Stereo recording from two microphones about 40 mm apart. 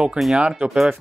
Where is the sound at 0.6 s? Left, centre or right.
Right.